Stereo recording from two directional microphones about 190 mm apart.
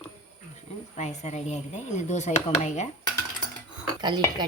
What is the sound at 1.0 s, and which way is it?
Speech, 35° left (ahead or behind).